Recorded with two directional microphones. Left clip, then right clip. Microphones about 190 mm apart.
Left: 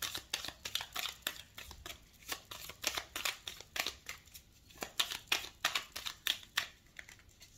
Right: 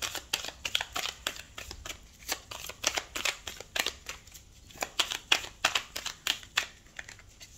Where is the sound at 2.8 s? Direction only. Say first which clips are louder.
Right 7 dB; 15° right (ahead or behind).